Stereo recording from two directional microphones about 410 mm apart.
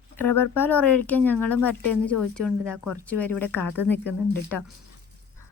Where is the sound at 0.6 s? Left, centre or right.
Centre.